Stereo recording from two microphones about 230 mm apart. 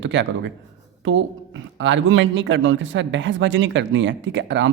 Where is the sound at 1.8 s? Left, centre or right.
Right.